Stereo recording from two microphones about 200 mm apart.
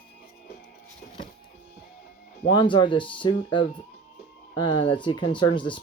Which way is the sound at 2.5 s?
25° left (ahead or behind).